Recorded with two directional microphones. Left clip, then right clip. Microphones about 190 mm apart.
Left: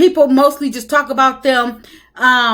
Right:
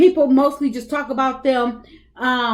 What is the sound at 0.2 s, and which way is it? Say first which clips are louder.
Speech: left 5 dB; 20° left (ahead or behind).